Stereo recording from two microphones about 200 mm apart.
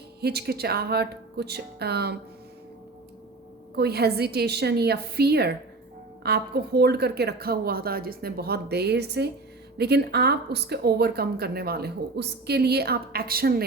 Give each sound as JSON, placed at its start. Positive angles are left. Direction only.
{"t": 0.2, "sound": "speech", "side_deg": -55}
{"t": 3.8, "sound": "speech", "side_deg": -55}